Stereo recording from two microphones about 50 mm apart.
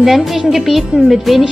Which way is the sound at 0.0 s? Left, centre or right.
Centre.